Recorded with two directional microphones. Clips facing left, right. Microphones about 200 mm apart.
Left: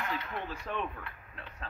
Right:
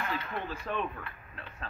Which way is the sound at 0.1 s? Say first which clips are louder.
Right 1 dB; 20° left (ahead or behind).